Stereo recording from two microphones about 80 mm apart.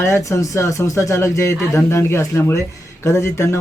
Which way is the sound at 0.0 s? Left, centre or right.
Left.